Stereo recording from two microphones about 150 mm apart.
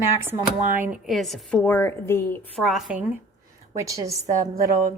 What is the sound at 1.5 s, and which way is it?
Speech, 15° left (ahead or behind).